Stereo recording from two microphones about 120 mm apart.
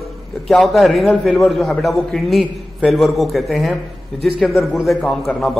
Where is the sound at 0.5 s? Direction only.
Centre (ahead or behind).